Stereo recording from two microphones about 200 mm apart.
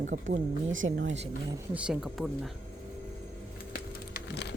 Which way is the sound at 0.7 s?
75° right (ahead or behind).